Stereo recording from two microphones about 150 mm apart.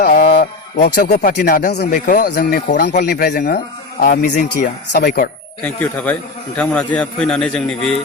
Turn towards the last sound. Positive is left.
turn(degrees=5)  # may be behind; listen again after turning